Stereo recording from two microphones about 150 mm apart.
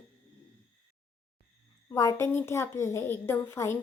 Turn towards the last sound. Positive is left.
turn(degrees=15)  # may be behind; listen again after turning